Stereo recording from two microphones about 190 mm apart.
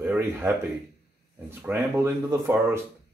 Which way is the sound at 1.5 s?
10° right (ahead or behind).